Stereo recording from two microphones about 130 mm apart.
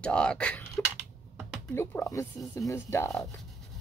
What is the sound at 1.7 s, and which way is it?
Speech, 15° left (ahead or behind).